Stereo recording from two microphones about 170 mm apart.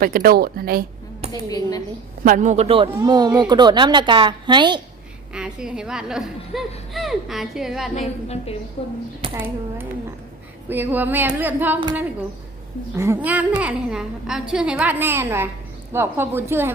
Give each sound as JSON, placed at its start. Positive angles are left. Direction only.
{"t": 0.0, "sound": "speech", "side_deg": -60}
{"t": 1.5, "sound": "a woman's voice", "side_deg": 20}
{"t": 2.2, "sound": "speech", "side_deg": -50}
{"t": 5.3, "sound": "speech", "side_deg": -5}
{"t": 9.3, "sound": "a woman's voice", "side_deg": -15}
{"t": 13.0, "sound": "a woman's voice", "side_deg": -15}